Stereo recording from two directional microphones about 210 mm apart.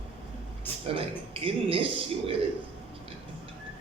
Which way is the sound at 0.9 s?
25° right (ahead or behind).